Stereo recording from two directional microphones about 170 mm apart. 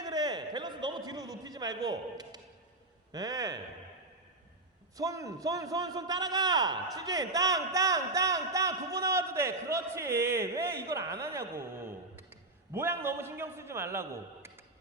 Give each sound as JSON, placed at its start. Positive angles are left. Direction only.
{"t": 0.0, "sound": "a sound", "side_deg": -25}
{"t": 3.1, "sound": "a man's voice", "side_deg": -20}
{"t": 4.9, "sound": "a man's voice", "side_deg": -20}